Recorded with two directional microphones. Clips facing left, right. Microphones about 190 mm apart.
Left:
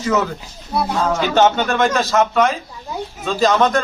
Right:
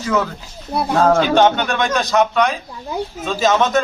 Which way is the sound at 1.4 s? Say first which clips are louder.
Even; 5° left (ahead or behind).